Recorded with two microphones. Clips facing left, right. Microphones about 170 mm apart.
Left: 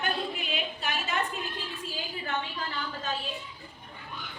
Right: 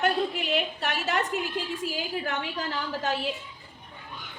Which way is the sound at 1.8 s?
90° right.